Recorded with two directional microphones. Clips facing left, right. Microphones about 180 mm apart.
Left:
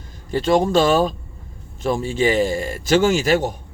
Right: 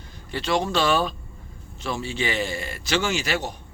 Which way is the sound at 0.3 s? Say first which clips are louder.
Left 7 dB; 45° left (ahead or behind).